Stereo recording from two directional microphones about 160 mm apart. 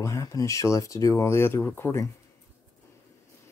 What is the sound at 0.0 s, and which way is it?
Speech, 20° left (ahead or behind).